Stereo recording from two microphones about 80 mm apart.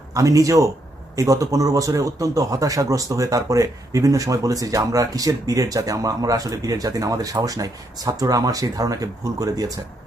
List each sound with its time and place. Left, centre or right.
0.1 s a man's voice: right